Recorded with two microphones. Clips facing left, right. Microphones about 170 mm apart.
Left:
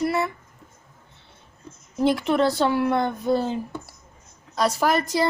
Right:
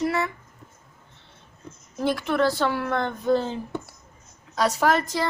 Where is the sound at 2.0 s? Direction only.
20° left (ahead or behind).